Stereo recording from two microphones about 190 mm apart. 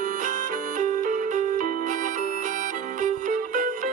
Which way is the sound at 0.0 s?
40° right (ahead or behind).